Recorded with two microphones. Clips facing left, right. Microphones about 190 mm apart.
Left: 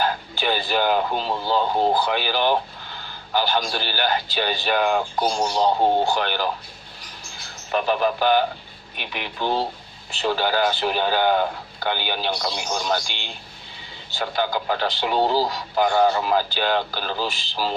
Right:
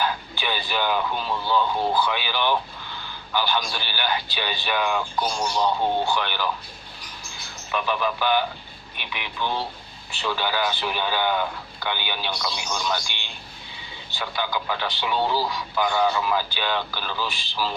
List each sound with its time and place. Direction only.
0.0 s speech: 45° left (ahead or behind)
7.7 s speech: 40° left (ahead or behind)